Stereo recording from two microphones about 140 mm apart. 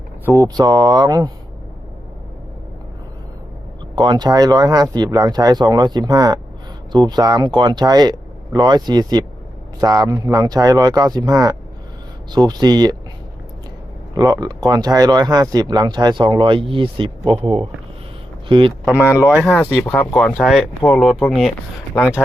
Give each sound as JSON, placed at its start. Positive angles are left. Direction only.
{"t": 0.3, "sound": "speech", "side_deg": -25}
{"t": 3.9, "sound": "speech", "side_deg": -30}
{"t": 14.2, "sound": "speech", "side_deg": -25}
{"t": 18.9, "sound": "speech", "side_deg": -15}
{"t": 19.5, "sound": "speech", "side_deg": 10}